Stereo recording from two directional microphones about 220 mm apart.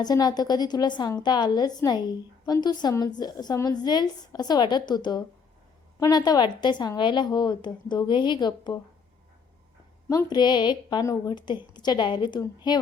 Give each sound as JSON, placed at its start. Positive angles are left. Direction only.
{"t": 0.0, "sound": "a woman's voice", "side_deg": 20}
{"t": 10.1, "sound": "a woman's voice", "side_deg": 20}